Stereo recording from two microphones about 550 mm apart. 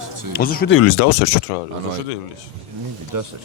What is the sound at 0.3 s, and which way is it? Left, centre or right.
Speech, centre.